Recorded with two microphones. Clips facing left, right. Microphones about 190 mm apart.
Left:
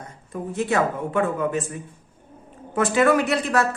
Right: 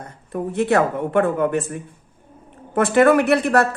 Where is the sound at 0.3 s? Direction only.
60° right (ahead or behind).